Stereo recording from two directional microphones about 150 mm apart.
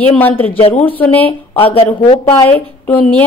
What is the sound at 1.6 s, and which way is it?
Speech, 40° left (ahead or behind).